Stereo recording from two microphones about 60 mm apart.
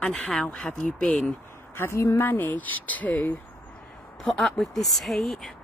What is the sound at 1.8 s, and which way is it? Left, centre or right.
Speech, left.